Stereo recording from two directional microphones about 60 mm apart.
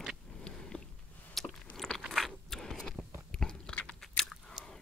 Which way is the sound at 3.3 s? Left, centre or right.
Centre.